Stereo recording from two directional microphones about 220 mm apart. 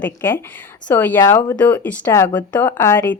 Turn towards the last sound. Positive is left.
turn(degrees=10)  # may be behind; listen again after turning